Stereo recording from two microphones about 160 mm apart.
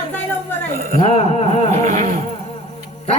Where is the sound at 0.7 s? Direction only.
65° right (ahead or behind).